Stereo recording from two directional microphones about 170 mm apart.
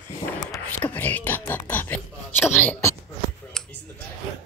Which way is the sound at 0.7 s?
10° left (ahead or behind).